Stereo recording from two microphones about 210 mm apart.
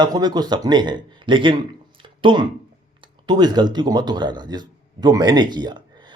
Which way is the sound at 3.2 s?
20° right (ahead or behind).